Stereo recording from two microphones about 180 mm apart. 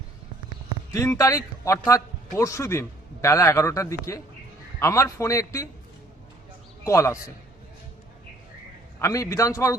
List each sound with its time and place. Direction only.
0.9 s a man's voice: 15° left (ahead or behind)
6.8 s a man's voice: 15° left (ahead or behind)
9.0 s a man's voice: 15° left (ahead or behind)